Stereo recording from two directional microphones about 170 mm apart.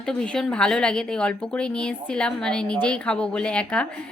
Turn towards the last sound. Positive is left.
turn(degrees=5)  # may be behind; listen again after turning